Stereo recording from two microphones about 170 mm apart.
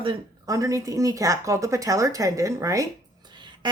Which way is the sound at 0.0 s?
25° right (ahead or behind).